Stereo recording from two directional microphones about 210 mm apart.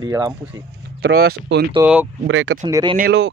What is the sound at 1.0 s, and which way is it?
Speech, 50° right (ahead or behind).